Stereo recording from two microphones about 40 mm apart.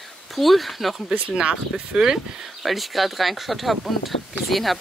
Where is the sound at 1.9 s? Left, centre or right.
Centre.